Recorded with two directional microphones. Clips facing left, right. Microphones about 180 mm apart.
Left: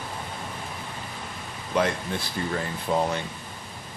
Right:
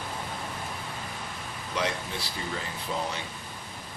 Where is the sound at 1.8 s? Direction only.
50° left (ahead or behind).